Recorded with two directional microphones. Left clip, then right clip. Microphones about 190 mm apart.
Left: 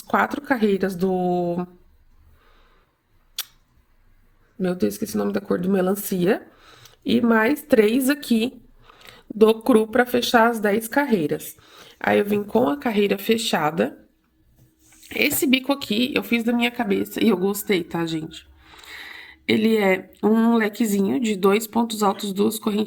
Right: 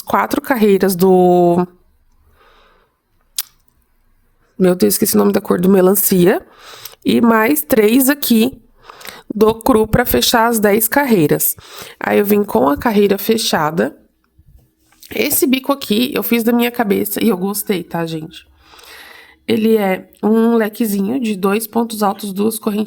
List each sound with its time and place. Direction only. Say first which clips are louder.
0.0 s speech: right 6 dB; 60° right (ahead or behind)
3.4 s a sound: right 6 dB; 65° right (ahead or behind)
4.6 s speech: right 11 dB; 65° right (ahead or behind); by 13.9 s 40° right (ahead or behind)
15.0 s speech: right 5 dB; 40° right (ahead or behind)